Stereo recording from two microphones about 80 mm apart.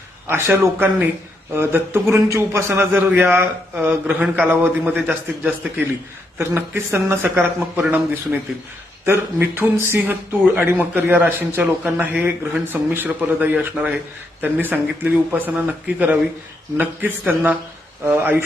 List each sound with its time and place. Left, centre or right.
0.3 s a man's voice: right
2.9 s a man's voice: right
6.4 s speech: right